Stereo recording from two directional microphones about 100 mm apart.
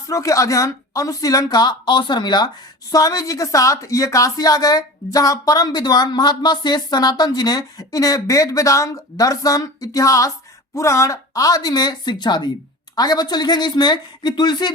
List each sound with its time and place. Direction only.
0.1 s speech: 35° left (ahead or behind)
2.9 s speech: 35° left (ahead or behind)